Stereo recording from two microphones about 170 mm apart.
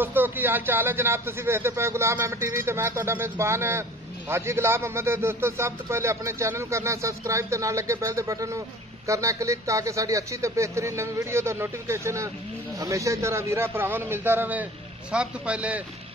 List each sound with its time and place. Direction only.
0.0 s a man's voice: 10° right (ahead or behind)